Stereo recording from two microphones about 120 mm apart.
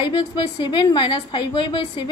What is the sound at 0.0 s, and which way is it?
A woman's voice, 40° left (ahead or behind).